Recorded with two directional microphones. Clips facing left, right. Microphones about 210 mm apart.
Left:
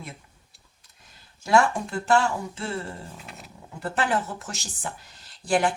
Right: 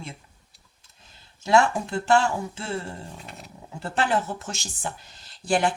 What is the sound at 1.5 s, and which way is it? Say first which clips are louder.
Speech: right 1 dB; 25° right (ahead or behind).